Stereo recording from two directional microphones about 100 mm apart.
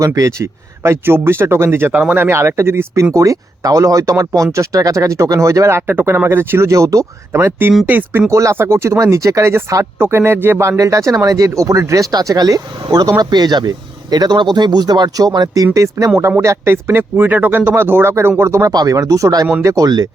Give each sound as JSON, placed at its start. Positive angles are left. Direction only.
{"t": 0.0, "sound": "speech", "side_deg": -35}
{"t": 1.9, "sound": "speech", "side_deg": -15}
{"t": 7.3, "sound": "speech", "side_deg": -20}
{"t": 8.3, "sound": "speech", "side_deg": -30}
{"t": 18.7, "sound": "speech", "side_deg": -40}